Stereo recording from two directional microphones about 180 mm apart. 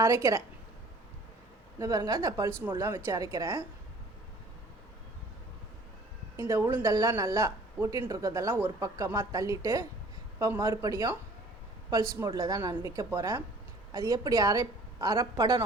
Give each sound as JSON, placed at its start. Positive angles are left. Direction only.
{"t": 0.0, "sound": "speech", "side_deg": -15}
{"t": 1.8, "sound": "speech", "side_deg": -20}
{"t": 6.5, "sound": "a woman's voice", "side_deg": -10}